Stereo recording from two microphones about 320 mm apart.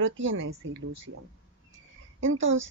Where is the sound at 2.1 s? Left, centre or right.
Right.